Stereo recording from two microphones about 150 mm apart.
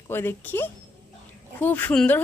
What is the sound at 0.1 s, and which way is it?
Speech, 15° left (ahead or behind).